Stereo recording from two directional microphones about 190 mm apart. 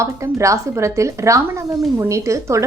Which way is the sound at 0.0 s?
15° right (ahead or behind).